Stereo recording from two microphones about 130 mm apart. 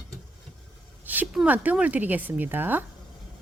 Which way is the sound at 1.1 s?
10° right (ahead or behind).